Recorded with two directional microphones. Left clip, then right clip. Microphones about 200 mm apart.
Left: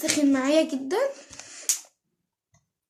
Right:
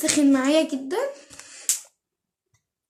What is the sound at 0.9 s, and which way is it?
Speech, 25° left (ahead or behind).